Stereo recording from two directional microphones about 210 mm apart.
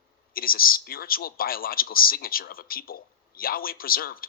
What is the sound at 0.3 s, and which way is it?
Speech, 45° left (ahead or behind).